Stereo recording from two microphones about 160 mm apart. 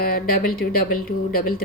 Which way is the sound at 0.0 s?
70° left (ahead or behind).